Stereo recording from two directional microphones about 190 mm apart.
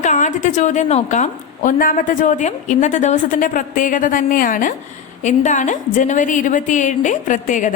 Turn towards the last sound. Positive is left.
turn(degrees=40)  # may be behind; listen again after turning